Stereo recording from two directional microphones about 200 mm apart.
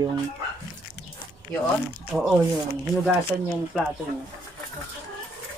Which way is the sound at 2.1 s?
10° right (ahead or behind).